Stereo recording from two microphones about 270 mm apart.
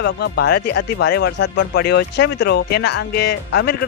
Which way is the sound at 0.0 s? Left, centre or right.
Left.